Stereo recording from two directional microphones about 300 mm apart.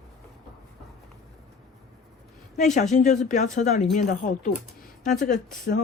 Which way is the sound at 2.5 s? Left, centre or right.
Left.